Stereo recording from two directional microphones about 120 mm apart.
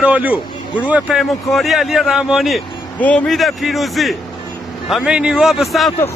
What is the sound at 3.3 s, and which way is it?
Speech, centre (ahead or behind).